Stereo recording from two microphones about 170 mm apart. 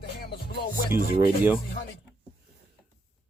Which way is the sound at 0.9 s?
15° right (ahead or behind).